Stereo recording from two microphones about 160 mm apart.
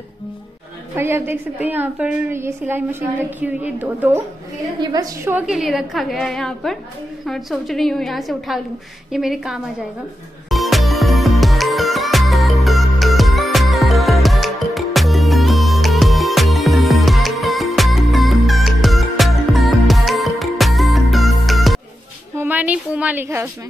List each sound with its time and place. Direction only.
0.9 s a woman's voice: 15° right (ahead or behind)
4.7 s a woman's voice: 25° right (ahead or behind)
5.3 s a woman's voice: centre (ahead or behind)
10.5 s music: centre (ahead or behind)
22.4 s a sound: 10° right (ahead or behind)